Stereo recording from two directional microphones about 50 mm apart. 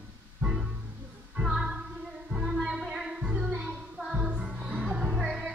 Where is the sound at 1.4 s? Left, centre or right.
Centre.